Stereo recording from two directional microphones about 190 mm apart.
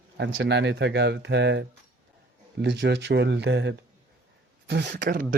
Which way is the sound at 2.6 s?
70° right (ahead or behind).